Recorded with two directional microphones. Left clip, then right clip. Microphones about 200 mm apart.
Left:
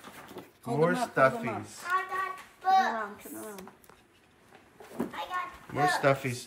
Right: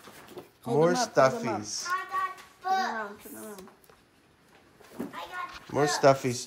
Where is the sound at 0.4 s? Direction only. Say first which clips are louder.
Right 3 dB; 10° right (ahead or behind).